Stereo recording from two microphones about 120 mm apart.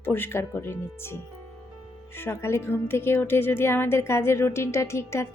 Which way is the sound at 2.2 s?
20° left (ahead or behind).